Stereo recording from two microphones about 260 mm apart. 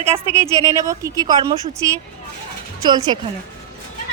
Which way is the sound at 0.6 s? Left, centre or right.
Centre.